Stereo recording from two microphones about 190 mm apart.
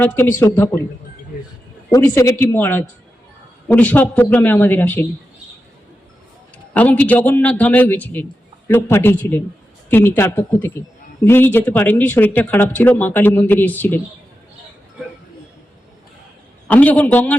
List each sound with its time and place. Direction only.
0.0 s speech: 15° left (ahead or behind)
1.9 s speech: 15° left (ahead or behind)
6.7 s speech: 10° left (ahead or behind)
16.6 s speech: 10° left (ahead or behind)